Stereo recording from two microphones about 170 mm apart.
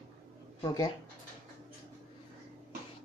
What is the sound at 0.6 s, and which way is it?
Speech, 25° left (ahead or behind).